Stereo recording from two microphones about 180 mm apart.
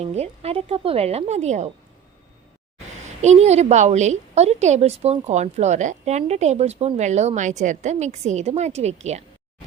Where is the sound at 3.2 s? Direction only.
40° right (ahead or behind).